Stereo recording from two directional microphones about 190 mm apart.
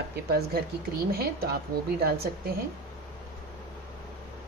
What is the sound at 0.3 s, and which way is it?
A woman's voice, 55° right (ahead or behind).